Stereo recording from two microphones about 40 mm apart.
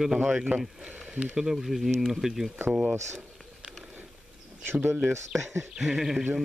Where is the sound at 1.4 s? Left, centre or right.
Centre.